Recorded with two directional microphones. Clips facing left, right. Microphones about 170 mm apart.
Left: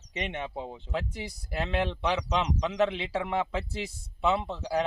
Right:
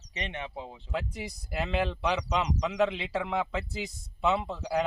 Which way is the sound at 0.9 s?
Centre (ahead or behind).